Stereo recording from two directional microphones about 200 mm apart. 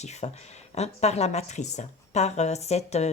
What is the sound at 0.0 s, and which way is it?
Speech, 35° left (ahead or behind).